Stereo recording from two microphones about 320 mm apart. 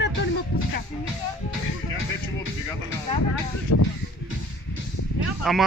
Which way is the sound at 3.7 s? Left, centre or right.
Left.